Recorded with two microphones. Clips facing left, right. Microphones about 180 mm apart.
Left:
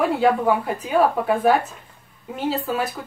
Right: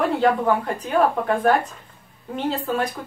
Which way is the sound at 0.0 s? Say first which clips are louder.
Left 1 dB; 5° left (ahead or behind).